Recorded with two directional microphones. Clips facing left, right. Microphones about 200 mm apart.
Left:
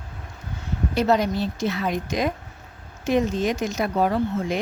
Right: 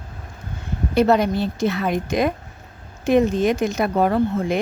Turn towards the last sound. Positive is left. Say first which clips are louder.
# right 4 dB
turn(degrees=-55)  # may be behind; listen again after turning